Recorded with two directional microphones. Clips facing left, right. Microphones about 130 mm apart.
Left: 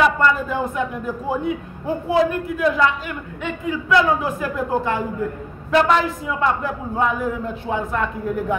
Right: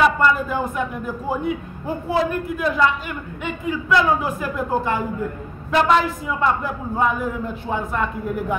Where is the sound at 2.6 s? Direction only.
5° right (ahead or behind).